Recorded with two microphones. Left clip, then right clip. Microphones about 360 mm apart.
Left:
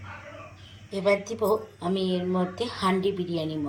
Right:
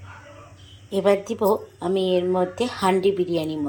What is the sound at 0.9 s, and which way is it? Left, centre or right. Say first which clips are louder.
A woman's voice: right 4 dB; centre.